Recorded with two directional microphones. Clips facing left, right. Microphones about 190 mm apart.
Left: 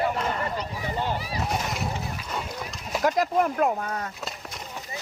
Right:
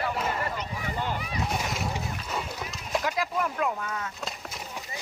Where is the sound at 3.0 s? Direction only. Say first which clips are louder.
Left 10 dB; 45° left (ahead or behind).